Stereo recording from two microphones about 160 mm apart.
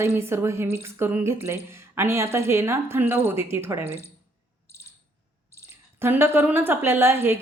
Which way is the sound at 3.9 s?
15° left (ahead or behind).